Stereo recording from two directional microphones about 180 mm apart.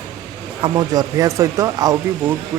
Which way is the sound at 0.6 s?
20° right (ahead or behind).